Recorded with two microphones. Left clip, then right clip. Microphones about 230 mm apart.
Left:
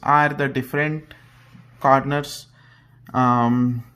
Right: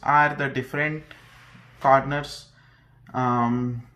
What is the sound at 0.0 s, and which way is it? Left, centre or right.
Speech, left.